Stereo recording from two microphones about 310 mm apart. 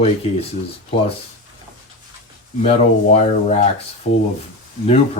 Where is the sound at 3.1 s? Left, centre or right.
Centre.